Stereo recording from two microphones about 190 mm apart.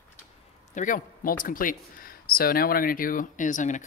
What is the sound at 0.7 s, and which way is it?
Speech, 45° left (ahead or behind).